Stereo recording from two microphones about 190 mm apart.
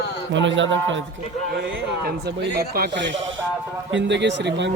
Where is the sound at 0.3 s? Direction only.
75° right (ahead or behind).